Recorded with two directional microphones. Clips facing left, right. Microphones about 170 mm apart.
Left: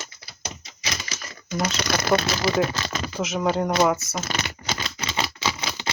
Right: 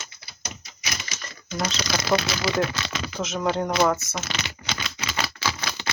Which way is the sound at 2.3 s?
40° left (ahead or behind).